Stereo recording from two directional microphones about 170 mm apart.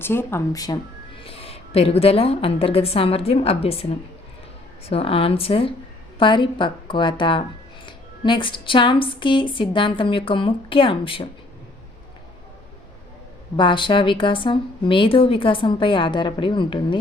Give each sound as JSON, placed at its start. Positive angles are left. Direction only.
{"t": 0.0, "sound": "speech", "side_deg": 15}
{"t": 1.2, "sound": "a woman's voice", "side_deg": 35}
{"t": 13.6, "sound": "a woman's voice", "side_deg": 30}